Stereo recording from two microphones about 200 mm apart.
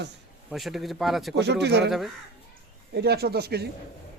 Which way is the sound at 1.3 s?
60° right (ahead or behind).